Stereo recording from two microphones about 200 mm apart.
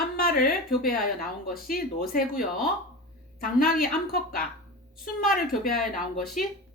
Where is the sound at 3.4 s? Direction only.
45° left (ahead or behind).